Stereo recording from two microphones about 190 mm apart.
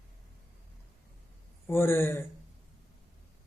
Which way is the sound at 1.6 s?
10° left (ahead or behind).